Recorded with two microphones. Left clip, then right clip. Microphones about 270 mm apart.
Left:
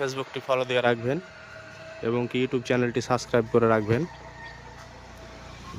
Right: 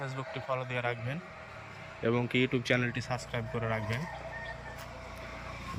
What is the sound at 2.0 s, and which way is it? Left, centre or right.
Speech, centre.